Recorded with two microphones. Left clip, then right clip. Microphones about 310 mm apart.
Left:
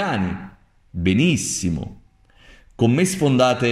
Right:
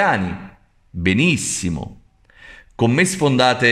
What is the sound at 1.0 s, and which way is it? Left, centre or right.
Speech, centre.